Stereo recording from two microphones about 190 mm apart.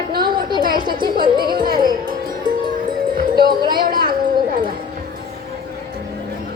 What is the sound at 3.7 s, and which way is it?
Speech, 50° right (ahead or behind).